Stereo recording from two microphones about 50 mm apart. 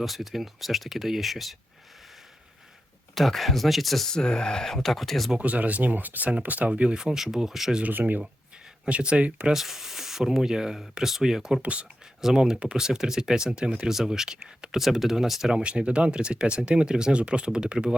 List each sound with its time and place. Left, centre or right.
0.0 s speech: centre
3.2 s speech: centre
5.4 s speech: right
6.9 s speech: centre
7.8 s speech: right
8.8 s speech: right
9.5 s speech: centre
11.6 s speech: right
12.2 s speech: centre